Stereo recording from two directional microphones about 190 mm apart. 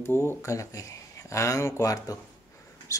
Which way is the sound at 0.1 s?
15° left (ahead or behind).